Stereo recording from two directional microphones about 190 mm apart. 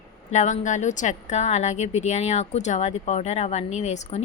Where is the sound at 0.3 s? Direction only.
40° left (ahead or behind).